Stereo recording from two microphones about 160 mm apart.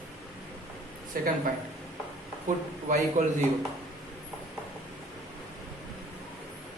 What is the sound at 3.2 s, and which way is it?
Speech, 55° right (ahead or behind).